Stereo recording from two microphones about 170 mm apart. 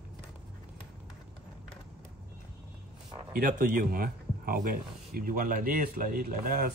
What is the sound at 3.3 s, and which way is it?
A man's voice, 65° right (ahead or behind).